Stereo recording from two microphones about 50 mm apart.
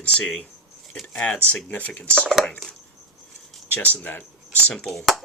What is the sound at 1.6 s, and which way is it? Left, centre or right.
Speech, left.